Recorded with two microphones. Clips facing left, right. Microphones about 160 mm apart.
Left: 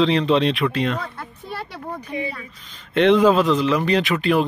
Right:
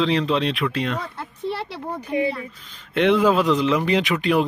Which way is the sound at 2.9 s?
10° right (ahead or behind).